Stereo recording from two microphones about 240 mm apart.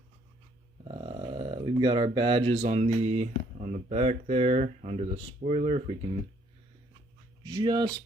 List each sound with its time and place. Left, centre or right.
0.9 s speech: right
7.5 s speech: centre